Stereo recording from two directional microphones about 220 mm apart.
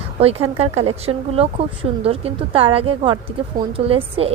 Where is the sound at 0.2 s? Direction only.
25° right (ahead or behind).